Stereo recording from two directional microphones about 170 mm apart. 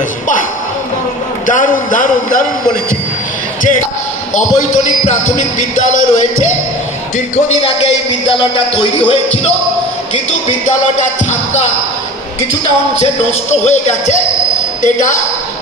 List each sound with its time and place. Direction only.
1.5 s music: 50° left (ahead or behind)
5.6 s music: 45° left (ahead or behind)
9.0 s music: 35° left (ahead or behind)
13.0 s music: 40° left (ahead or behind)